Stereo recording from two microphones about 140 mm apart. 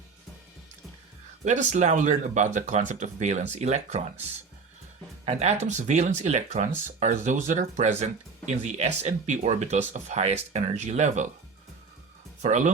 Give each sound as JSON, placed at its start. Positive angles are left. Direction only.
{"t": 1.5, "sound": "speech", "side_deg": -55}
{"t": 5.2, "sound": "speech", "side_deg": -50}
{"t": 12.4, "sound": "speech", "side_deg": -60}